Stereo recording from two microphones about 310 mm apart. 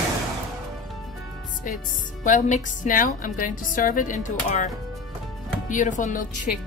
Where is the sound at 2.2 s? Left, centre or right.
Left.